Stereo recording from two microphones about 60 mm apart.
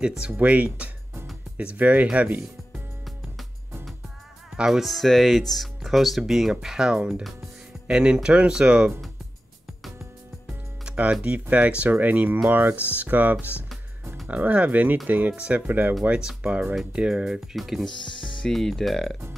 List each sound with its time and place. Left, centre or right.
0.0 s speech: centre
4.6 s speech: centre
10.9 s music: right
11.2 s speech: right
16.0 s speech: centre